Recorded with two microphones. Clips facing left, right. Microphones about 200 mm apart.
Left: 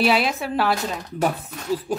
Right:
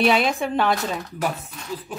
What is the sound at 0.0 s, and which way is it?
Speech, 5° left (ahead or behind).